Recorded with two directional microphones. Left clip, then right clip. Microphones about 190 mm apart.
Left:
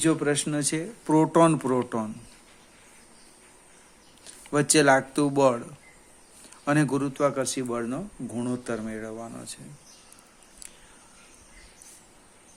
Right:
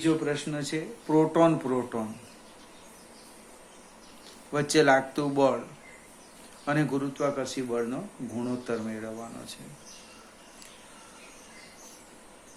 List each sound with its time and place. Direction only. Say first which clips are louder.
0.0 s speech: left 3 dB; 60° left (ahead or behind)
4.5 s speech: left 2 dB; 55° left (ahead or behind)
6.7 s speech: left 3 dB; 55° left (ahead or behind)